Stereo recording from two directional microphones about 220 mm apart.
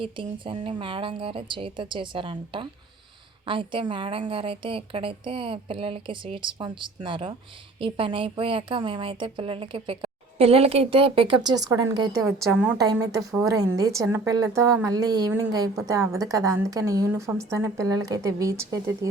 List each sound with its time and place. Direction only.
0.0 s a woman's voice: 25° right (ahead or behind)